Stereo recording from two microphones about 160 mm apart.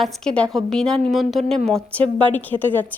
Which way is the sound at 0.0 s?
5° left (ahead or behind).